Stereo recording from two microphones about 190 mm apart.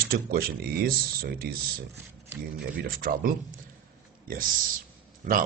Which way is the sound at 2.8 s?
50° right (ahead or behind).